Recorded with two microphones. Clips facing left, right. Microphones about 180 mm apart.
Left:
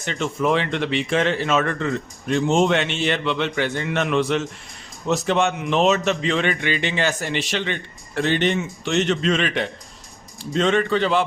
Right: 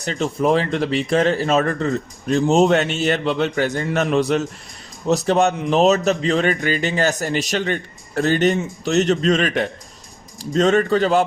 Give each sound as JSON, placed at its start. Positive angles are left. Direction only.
{"t": 0.0, "sound": "speech", "side_deg": -40}